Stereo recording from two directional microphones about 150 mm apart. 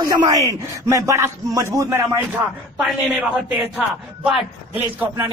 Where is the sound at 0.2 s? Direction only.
20° right (ahead or behind).